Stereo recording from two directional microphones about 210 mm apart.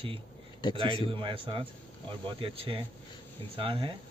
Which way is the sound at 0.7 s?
25° right (ahead or behind).